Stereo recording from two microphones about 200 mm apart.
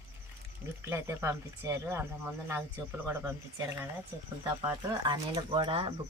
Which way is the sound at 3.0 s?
10° right (ahead or behind).